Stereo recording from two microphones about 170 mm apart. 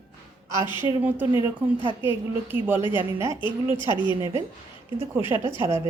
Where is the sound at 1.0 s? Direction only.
10° right (ahead or behind).